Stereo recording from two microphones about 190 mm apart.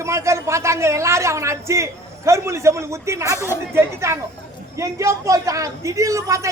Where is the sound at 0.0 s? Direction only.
15° right (ahead or behind).